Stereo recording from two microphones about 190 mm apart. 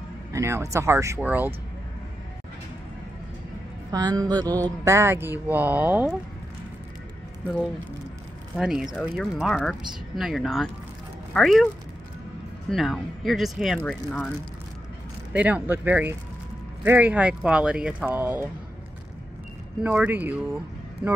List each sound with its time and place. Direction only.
0.3 s speech: 15° right (ahead or behind)
3.9 s a woman's voice: 20° right (ahead or behind)
8.5 s speech: centre (ahead or behind)
12.7 s speech: centre (ahead or behind)
15.3 s speech: 10° right (ahead or behind)
19.8 s speech: 10° right (ahead or behind)